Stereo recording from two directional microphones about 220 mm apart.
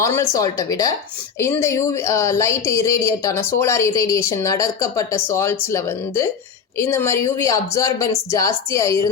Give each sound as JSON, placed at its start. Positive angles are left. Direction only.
{"t": 0.0, "sound": "speech", "side_deg": 15}